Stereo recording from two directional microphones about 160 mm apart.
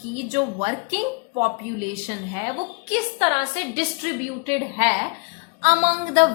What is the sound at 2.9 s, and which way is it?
A woman's voice, 40° right (ahead or behind).